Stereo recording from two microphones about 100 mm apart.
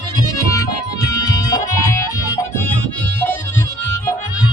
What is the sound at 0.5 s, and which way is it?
Music, 35° left (ahead or behind).